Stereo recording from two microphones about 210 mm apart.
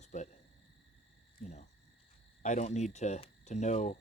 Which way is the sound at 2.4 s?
35° left (ahead or behind).